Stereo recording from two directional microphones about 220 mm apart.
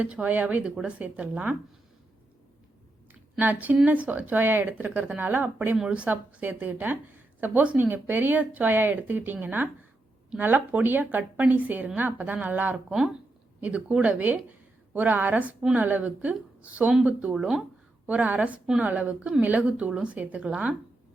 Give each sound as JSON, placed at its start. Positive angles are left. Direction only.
{"t": 0.0, "sound": "speech", "side_deg": -5}
{"t": 3.3, "sound": "speech", "side_deg": -5}